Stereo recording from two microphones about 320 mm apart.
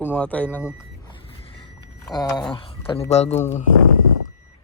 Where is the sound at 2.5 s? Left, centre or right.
Centre.